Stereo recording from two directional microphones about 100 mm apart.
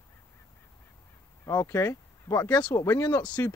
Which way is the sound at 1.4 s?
30° left (ahead or behind).